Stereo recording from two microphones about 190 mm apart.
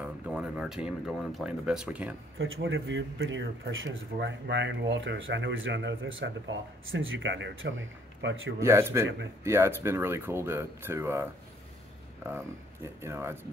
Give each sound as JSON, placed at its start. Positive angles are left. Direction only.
{"t": 0.0, "sound": "speech", "side_deg": -5}
{"t": 2.3, "sound": "speech", "side_deg": -90}
{"t": 8.5, "sound": "speech", "side_deg": -15}